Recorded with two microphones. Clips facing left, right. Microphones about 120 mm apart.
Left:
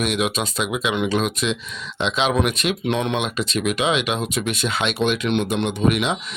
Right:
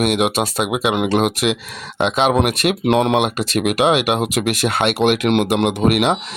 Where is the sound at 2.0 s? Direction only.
55° right (ahead or behind).